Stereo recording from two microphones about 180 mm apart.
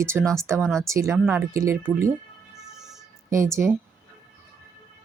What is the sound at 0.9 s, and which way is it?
Speech, 15° right (ahead or behind).